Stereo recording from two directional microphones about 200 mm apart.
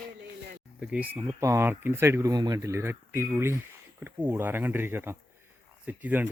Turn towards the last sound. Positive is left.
turn(degrees=-10)  # may be behind; listen again after turning